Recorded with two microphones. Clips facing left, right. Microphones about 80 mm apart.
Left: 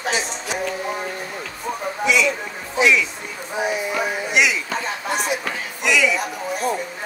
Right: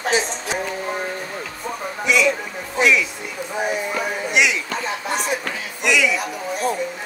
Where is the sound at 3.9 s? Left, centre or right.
Centre.